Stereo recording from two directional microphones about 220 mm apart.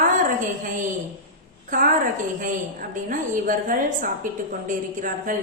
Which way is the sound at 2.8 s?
35° right (ahead or behind).